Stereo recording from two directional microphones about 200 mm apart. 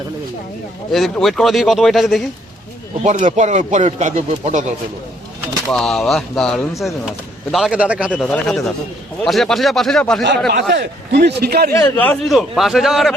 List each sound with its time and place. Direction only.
0.9 s speech: centre (ahead or behind)
3.0 s speech: 40° right (ahead or behind)
5.6 s speech: centre (ahead or behind)
8.1 s speech: 5° left (ahead or behind)
10.2 s a man's voice: 55° right (ahead or behind)
11.7 s a man's voice: 10° left (ahead or behind)